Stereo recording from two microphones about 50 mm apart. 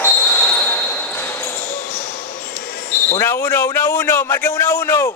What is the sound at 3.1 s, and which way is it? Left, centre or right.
A man's voice, left.